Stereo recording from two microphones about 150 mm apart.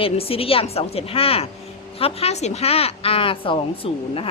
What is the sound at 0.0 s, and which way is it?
Speech, 40° left (ahead or behind).